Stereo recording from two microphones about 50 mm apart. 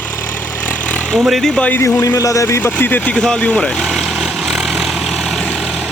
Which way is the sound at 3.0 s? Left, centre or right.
Left.